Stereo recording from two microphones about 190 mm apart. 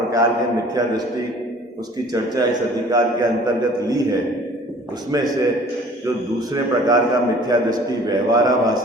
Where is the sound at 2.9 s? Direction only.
20° right (ahead or behind).